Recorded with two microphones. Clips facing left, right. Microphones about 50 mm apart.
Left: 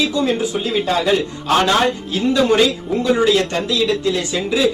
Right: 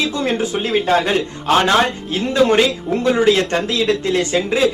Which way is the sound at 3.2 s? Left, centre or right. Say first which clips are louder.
Right 1 dB; right.